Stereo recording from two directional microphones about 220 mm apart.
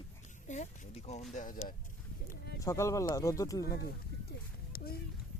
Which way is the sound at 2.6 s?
15° left (ahead or behind).